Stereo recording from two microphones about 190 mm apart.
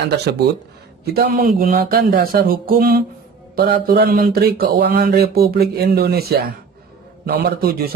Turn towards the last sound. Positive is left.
turn(degrees=-50)  # may be behind; listen again after turning